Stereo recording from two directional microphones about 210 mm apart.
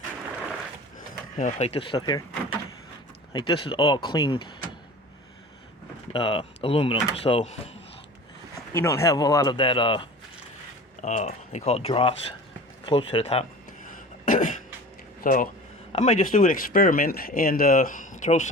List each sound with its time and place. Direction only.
1.4 s speech: 35° left (ahead or behind)
6.1 s speech: 25° left (ahead or behind)
8.7 s speech: 15° left (ahead or behind)
11.0 s speech: 35° left (ahead or behind)
13.9 s throat clearing: 40° left (ahead or behind)
15.2 s speech: 40° left (ahead or behind)